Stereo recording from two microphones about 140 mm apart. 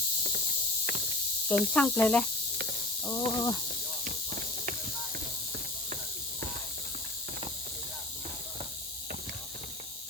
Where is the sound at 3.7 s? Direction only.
80° right.